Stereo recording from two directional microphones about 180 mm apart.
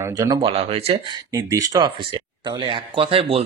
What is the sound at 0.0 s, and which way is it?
Speech, 15° right (ahead or behind).